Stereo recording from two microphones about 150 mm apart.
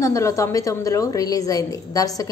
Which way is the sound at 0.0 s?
20° left (ahead or behind).